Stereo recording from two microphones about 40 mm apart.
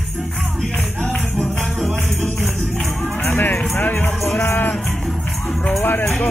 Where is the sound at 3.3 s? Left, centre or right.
Left.